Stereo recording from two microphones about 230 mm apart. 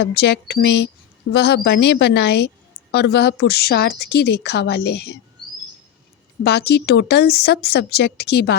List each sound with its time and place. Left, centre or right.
0.0 s speech: left
6.4 s speech: left